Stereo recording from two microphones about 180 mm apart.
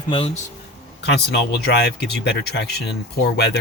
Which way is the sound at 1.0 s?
70° left (ahead or behind).